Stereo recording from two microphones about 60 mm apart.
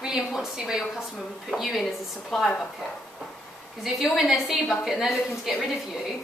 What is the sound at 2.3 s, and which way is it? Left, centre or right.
Speech, centre.